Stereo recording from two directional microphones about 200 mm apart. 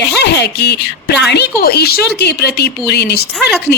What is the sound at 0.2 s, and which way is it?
A woman's voice, 55° left (ahead or behind).